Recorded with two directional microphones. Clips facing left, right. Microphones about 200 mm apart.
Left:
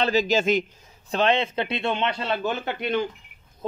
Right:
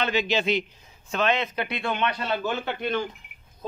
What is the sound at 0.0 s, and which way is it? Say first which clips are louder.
Speech: left 3 dB; 40° left (ahead or behind).